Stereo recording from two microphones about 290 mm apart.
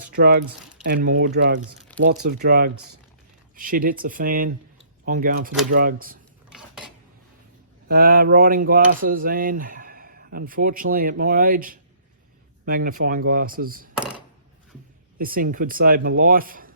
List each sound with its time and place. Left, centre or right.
0.1 s speech: right
1.9 s a sound: centre
2.4 s speech: right
6.5 s cutlery: centre
7.9 s speech: right
13.9 s a sound: centre
15.2 s speech: right